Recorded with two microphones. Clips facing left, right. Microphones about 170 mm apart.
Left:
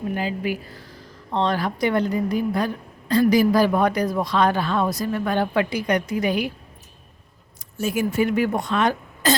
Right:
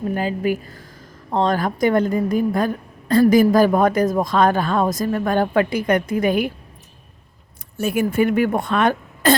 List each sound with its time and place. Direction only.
0.1 s speech: 45° right (ahead or behind)
7.8 s a woman's voice: 60° right (ahead or behind)